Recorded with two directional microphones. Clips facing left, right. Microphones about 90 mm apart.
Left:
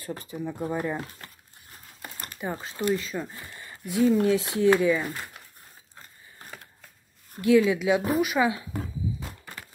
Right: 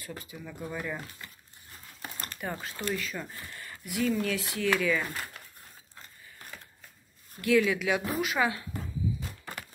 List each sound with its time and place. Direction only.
0.0 s speech: 40° left (ahead or behind)
2.1 s crumpling: 15° left (ahead or behind)
2.6 s speech: 20° left (ahead or behind)
7.4 s speech: 25° left (ahead or behind)